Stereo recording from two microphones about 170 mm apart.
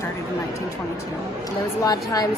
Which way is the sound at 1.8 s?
20° left (ahead or behind).